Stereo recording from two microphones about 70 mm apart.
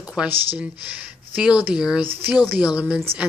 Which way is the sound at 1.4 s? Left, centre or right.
Centre.